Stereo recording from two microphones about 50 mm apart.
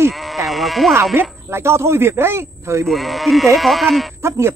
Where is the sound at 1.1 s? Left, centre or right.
Right.